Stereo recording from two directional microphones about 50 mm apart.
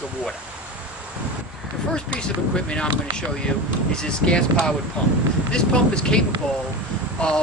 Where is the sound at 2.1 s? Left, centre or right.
Centre.